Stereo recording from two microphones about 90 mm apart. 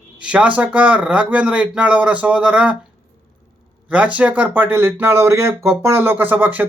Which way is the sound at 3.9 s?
15° right (ahead or behind).